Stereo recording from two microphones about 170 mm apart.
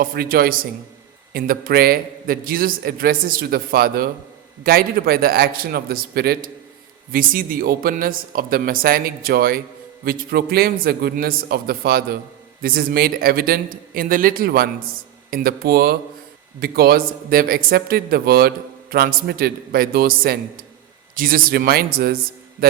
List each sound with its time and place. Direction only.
0.0 s a man's voice: 60° right (ahead or behind)